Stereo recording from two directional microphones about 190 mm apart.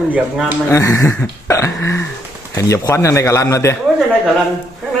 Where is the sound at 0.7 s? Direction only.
15° left (ahead or behind).